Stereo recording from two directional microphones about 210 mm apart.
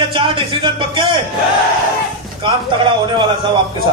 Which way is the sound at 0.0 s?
25° right (ahead or behind).